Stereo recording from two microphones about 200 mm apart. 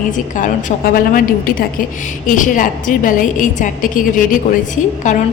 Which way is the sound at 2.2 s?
40° left (ahead or behind).